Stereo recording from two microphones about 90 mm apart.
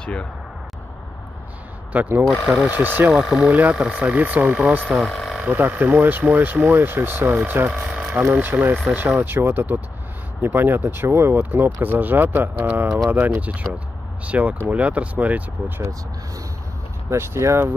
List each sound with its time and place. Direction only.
0.0 s speech: 10° left (ahead or behind)
1.9 s speech: 20° right (ahead or behind)
2.2 s speech: centre (ahead or behind)
2.5 s speech: 20° right (ahead or behind)
3.1 s speech: centre (ahead or behind)
3.3 s speech: 15° right (ahead or behind)
4.9 s speech: 5° left (ahead or behind)
5.3 s speech: 15° right (ahead or behind)
17.1 s speech: 30° right (ahead or behind)